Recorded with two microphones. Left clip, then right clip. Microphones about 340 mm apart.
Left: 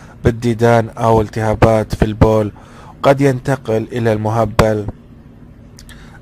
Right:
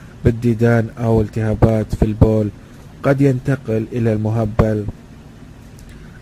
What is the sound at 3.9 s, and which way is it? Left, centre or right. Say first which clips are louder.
Speech: left 3 dB; centre.